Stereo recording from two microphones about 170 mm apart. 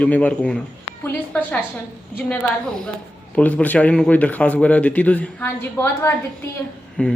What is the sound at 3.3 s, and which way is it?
Speech, 10° left (ahead or behind).